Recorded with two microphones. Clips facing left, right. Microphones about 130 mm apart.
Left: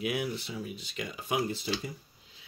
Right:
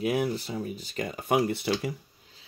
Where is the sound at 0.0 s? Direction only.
40° right (ahead or behind); by 1.7 s 60° right (ahead or behind).